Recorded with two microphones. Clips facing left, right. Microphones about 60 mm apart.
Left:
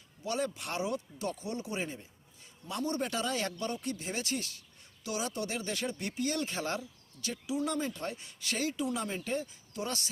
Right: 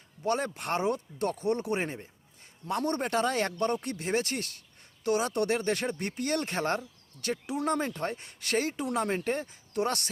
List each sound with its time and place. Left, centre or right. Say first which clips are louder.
0.2 s speech: right 4 dB; right